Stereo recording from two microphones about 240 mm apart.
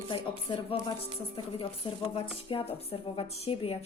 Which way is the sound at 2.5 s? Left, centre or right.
Left.